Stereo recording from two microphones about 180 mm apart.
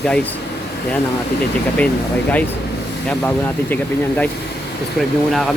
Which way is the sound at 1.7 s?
10° left (ahead or behind).